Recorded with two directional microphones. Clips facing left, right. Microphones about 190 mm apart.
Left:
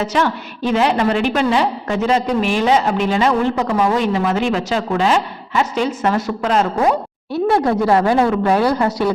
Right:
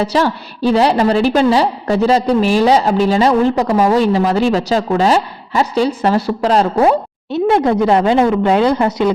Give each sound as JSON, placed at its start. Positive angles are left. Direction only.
{"t": 0.0, "sound": "a woman's voice", "side_deg": -35}
{"t": 7.3, "sound": "speech", "side_deg": -20}